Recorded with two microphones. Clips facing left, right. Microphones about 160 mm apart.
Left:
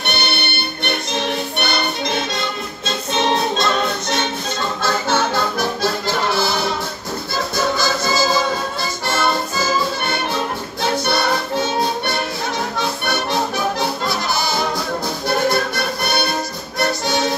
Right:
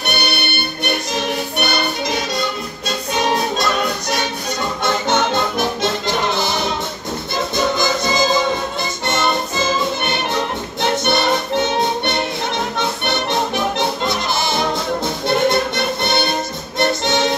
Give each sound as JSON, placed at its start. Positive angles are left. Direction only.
{"t": 4.8, "sound": "music", "side_deg": -20}